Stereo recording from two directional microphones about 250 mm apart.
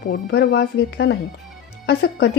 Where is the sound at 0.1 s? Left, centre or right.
Left.